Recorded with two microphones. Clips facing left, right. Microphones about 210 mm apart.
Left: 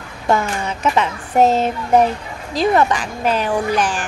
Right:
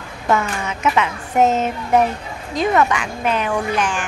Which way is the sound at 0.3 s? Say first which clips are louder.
Left 1 dB; 35° left (ahead or behind).